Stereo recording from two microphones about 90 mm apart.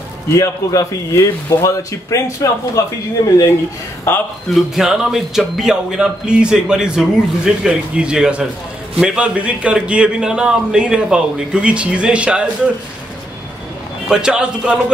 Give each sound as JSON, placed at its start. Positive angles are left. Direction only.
{"t": 0.4, "sound": "a man's voice", "side_deg": 35}
{"t": 4.1, "sound": "speech", "side_deg": 25}
{"t": 4.6, "sound": "speech", "side_deg": -5}
{"t": 14.0, "sound": "speech", "side_deg": -10}